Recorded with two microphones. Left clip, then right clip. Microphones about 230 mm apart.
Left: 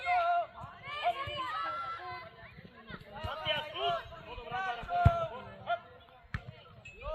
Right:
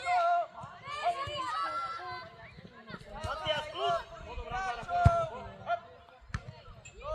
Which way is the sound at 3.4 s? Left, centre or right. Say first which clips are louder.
Even; right.